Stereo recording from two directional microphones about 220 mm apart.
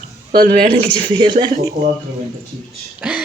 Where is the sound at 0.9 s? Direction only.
20° right (ahead or behind).